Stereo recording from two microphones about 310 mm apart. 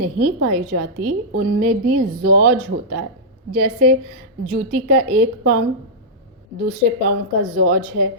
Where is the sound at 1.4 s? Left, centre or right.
Right.